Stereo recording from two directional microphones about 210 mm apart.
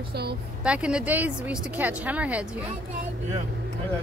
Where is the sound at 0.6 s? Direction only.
5° right (ahead or behind).